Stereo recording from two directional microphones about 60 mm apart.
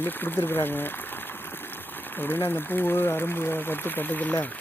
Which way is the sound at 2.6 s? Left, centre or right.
Left.